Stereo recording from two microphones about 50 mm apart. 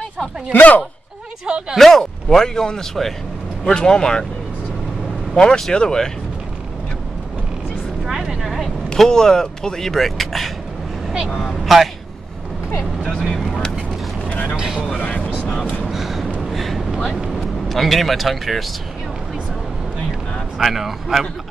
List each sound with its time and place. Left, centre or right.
0.5 s speech: left
1.4 s speech: centre
1.8 s speech: centre
5.3 s speech: centre
8.0 s vehicle: centre
8.8 s speech: centre
13.2 s vehicle: centre
14.3 s vehicle: left
15.8 s a sound: centre
16.3 s vehicle: centre
17.6 s speech: centre
20.5 s speech: centre